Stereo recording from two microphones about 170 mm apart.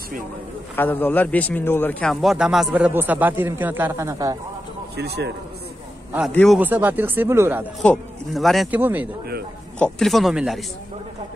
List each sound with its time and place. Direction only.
0.7 s a man's voice: 10° left (ahead or behind); by 4.4 s 20° right (ahead or behind)
4.9 s a man's voice: 70° right (ahead or behind)
6.3 s a man's voice: 5° left (ahead or behind)
6.6 s speech: 10° right (ahead or behind)
7.8 s a man's voice: 5° left (ahead or behind)
9.8 s a man's voice: 5° left (ahead or behind)